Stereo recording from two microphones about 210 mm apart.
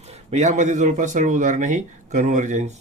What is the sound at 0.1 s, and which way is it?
A man's voice, 30° right (ahead or behind).